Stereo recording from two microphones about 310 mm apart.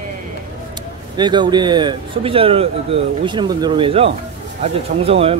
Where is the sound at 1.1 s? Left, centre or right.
Centre.